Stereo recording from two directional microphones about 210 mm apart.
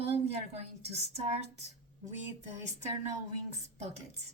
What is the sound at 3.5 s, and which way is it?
Speech, 30° right (ahead or behind).